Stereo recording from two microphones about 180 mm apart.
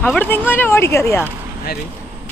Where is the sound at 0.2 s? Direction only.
10° left (ahead or behind).